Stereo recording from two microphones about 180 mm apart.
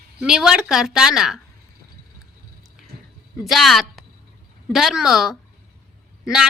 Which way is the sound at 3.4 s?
Centre (ahead or behind).